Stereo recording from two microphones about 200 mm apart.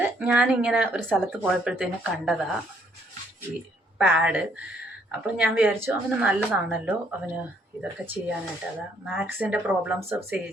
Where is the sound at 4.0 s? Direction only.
5° right (ahead or behind).